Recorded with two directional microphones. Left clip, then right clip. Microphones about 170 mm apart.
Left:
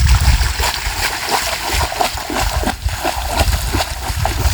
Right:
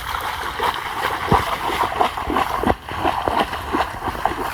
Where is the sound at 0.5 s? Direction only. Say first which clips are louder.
Left 2 dB; 30° left (ahead or behind).